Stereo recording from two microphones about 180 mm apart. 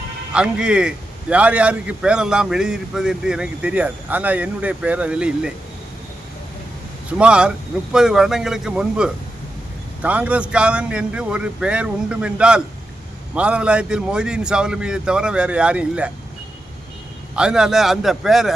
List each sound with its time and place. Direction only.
0.3 s a man's voice: 5° right (ahead or behind)
7.2 s a man's voice: 5° right (ahead or behind)
17.3 s a man's voice: 5° right (ahead or behind)